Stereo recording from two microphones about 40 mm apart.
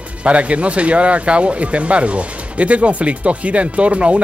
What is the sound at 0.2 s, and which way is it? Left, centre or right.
Speech, right.